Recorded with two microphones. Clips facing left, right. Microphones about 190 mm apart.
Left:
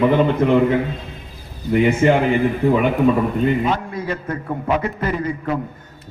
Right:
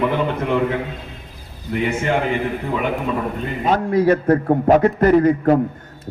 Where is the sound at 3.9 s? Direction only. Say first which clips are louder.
Right 11 dB; 65° right (ahead or behind).